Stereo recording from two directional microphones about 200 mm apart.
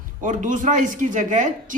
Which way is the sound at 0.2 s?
40° right (ahead or behind).